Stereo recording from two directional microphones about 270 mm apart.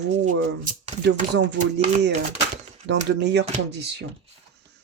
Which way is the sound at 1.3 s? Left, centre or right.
Right.